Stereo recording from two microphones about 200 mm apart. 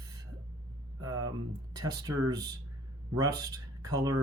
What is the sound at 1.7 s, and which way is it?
Speech, 20° right (ahead or behind).